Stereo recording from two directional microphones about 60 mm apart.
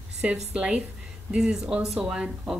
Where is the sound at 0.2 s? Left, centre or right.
Centre.